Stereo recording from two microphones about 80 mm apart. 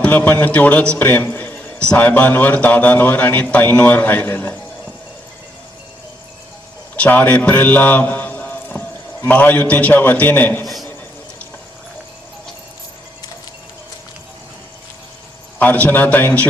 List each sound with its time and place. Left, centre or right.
0.0 s a man's voice: centre
6.9 s a man's voice: centre
15.5 s a man's voice: left